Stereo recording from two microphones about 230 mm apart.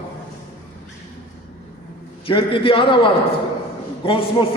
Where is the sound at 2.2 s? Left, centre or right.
Left.